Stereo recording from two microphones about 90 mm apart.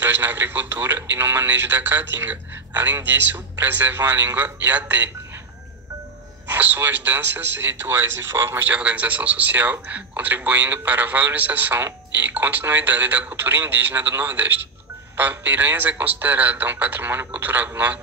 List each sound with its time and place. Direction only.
0.0 s speech: 20° right (ahead or behind)
6.4 s speech: 20° right (ahead or behind)